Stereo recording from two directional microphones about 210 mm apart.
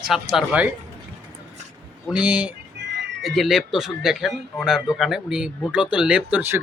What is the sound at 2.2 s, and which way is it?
Speech, 5° right (ahead or behind).